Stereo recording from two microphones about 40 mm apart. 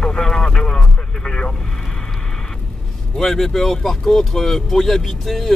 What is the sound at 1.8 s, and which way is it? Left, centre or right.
Vehicle, centre.